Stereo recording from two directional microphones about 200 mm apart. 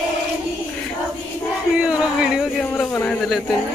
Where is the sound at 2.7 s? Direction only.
10° left (ahead or behind).